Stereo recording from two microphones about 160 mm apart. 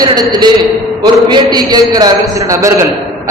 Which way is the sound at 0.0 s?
25° right (ahead or behind).